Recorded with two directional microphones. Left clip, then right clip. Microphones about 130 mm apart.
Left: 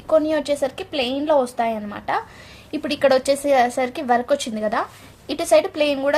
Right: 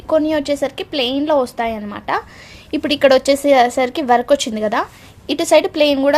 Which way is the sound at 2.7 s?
65° right (ahead or behind).